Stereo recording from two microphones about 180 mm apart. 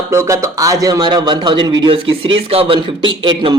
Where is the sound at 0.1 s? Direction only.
15° right (ahead or behind).